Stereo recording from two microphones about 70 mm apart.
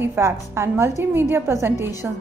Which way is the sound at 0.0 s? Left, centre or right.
Right.